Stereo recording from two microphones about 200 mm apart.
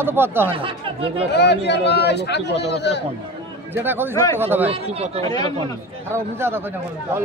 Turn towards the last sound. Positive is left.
turn(degrees=-10)  # may be behind; listen again after turning